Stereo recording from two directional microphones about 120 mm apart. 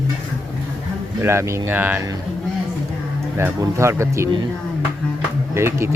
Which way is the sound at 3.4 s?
20° right (ahead or behind).